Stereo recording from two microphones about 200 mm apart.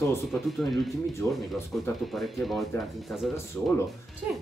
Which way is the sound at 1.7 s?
5° left (ahead or behind).